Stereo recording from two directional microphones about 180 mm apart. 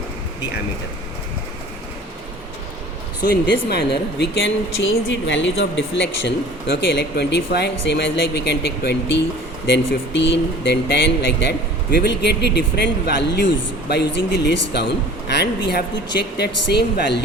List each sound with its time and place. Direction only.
3.2 s speech: 65° left (ahead or behind)